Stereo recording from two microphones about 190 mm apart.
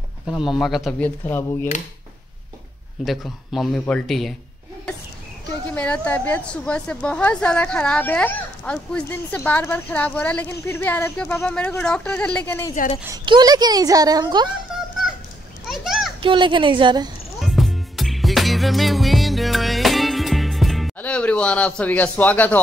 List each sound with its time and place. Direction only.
0.3 s speech: centre (ahead or behind)
3.1 s speech: centre (ahead or behind)
5.8 s a woman's voice: 5° left (ahead or behind)
13.0 s speech: 20° right (ahead or behind)
14.7 s a sound: centre (ahead or behind)
16.2 s speech: 25° right (ahead or behind)
17.4 s music: centre (ahead or behind)